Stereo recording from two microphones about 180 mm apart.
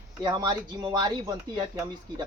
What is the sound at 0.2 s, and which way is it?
Speech, 20° right (ahead or behind).